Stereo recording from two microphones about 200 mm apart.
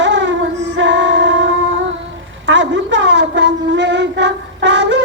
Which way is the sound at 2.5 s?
65° right (ahead or behind).